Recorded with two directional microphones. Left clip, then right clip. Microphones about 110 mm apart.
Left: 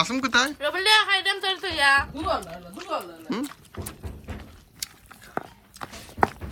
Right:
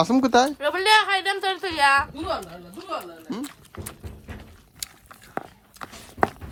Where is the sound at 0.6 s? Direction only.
90° right.